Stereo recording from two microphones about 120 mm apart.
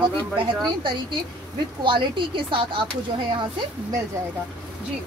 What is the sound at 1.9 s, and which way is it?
Speech, 45° right (ahead or behind).